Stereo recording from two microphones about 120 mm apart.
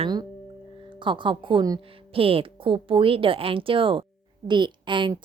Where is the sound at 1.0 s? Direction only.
45° right (ahead or behind).